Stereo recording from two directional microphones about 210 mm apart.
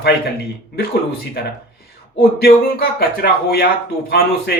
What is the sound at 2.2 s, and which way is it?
A man's voice, 50° left (ahead or behind).